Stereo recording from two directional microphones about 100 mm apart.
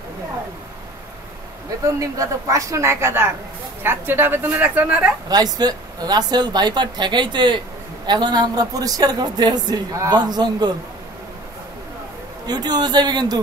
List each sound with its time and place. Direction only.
2.0 s a woman's voice: 35° right (ahead or behind); by 5.1 s 15° right (ahead or behind)
5.3 s speech: 40° right (ahead or behind)
12.4 s speech: 45° right (ahead or behind)